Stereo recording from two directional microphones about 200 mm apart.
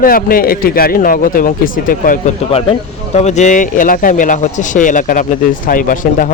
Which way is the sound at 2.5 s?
30° left (ahead or behind).